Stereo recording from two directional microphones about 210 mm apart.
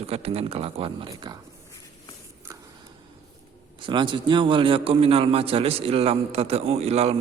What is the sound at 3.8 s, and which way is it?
Speech, 20° right (ahead or behind).